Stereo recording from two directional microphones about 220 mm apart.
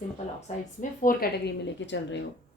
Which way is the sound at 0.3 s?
35° left (ahead or behind).